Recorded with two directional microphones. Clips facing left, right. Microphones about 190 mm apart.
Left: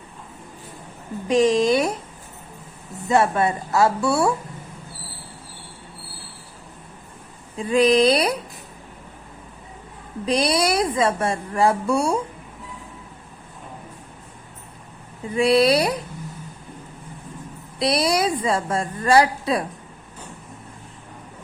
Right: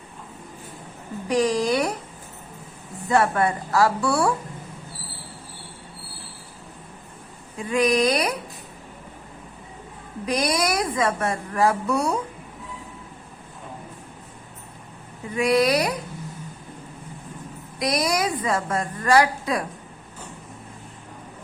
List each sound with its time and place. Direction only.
1.3 s a woman's voice: 25° left (ahead or behind)
3.1 s a woman's voice: 25° left (ahead or behind)
7.5 s speech: 30° left (ahead or behind)
10.2 s a woman's voice: 30° left (ahead or behind)
15.3 s a woman's voice: 30° left (ahead or behind)
17.7 s a woman's voice: 30° left (ahead or behind)